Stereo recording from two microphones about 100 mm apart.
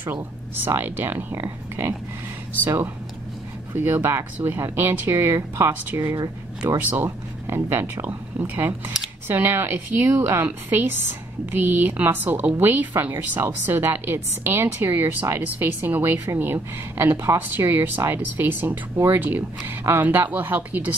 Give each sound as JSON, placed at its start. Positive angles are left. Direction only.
{"t": 0.0, "sound": "speech", "side_deg": -20}
{"t": 2.6, "sound": "speech", "side_deg": -20}
{"t": 6.1, "sound": "speech", "side_deg": -40}
{"t": 7.4, "sound": "speech", "side_deg": -25}